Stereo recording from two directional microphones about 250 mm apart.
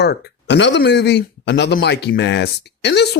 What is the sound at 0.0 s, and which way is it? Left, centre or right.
Speech, left.